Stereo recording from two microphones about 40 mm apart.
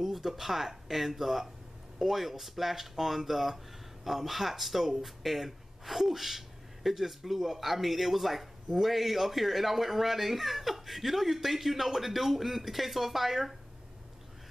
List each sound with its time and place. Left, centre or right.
0.0 s speech: centre